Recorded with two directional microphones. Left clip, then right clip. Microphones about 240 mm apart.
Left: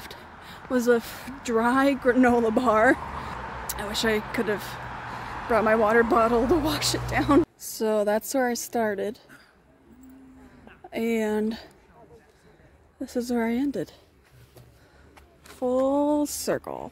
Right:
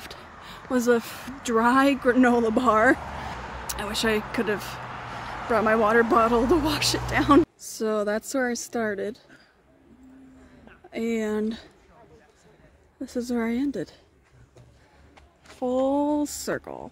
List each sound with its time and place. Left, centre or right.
0.4 s speech: centre
3.0 s vehicle: right
3.3 s vehicle: right
3.6 s speech: centre
5.1 s a sound: right
5.5 s a woman's voice: centre
7.4 s a woman's voice: centre
10.9 s a woman's voice: centre
13.0 s a woman's voice: centre
15.8 s a woman's voice: centre